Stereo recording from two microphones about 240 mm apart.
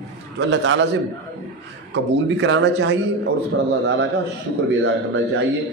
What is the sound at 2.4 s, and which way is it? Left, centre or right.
Speech, right.